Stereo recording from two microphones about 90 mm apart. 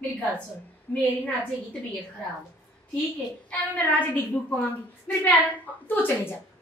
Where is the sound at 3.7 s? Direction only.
20° left (ahead or behind).